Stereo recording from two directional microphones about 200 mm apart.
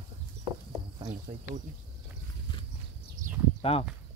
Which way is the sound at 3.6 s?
30° left (ahead or behind).